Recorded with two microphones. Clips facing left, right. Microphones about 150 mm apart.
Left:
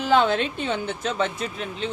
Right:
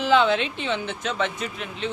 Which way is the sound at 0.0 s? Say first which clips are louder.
Even; 45° left (ahead or behind).